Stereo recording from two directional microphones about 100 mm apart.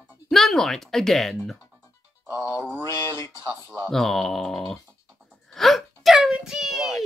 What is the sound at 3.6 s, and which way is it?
Speech, 20° right (ahead or behind).